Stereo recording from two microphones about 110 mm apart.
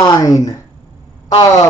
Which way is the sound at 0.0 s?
35° left (ahead or behind).